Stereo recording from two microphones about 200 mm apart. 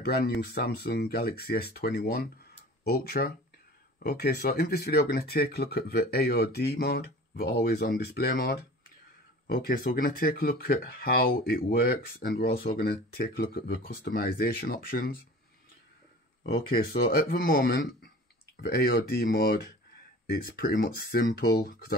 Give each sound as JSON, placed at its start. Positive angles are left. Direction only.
{"t": 0.0, "sound": "speech", "side_deg": 50}
{"t": 16.5, "sound": "speech", "side_deg": 45}